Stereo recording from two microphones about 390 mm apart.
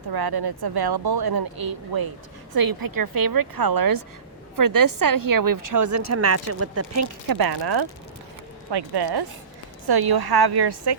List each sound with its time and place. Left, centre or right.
0.1 s a woman's voice: right
7.3 s speech: right